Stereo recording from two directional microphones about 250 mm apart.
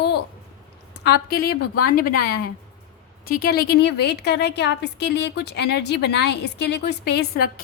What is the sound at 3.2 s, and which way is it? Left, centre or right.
A woman's voice, left.